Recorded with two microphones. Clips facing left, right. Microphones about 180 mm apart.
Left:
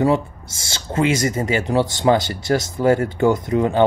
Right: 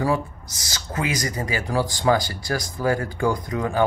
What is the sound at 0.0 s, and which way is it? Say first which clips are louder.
Speech: left 5 dB; 25° left (ahead or behind).